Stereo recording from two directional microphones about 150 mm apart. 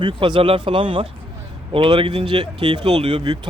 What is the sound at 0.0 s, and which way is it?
Speech, 35° right (ahead or behind).